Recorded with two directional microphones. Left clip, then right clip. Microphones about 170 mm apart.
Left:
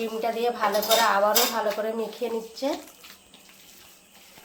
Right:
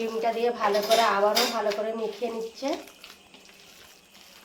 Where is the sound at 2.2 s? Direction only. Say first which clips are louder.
Left 4 dB; 35° left (ahead or behind).